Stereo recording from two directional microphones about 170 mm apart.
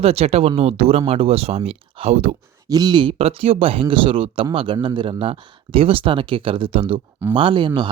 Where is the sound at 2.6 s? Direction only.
25° right (ahead or behind).